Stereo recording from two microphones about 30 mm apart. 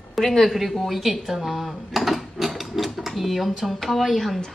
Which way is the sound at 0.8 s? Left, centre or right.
Centre.